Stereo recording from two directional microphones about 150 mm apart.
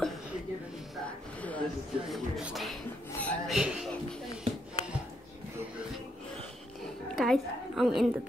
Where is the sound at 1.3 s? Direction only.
10° left (ahead or behind).